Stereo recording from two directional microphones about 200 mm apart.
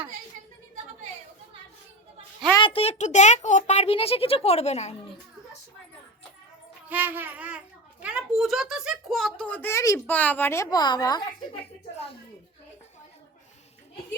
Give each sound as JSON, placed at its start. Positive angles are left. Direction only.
{"t": 2.6, "sound": "a child's voice", "side_deg": 25}
{"t": 6.8, "sound": "a sound", "side_deg": -10}
{"t": 8.0, "sound": "speech", "side_deg": -5}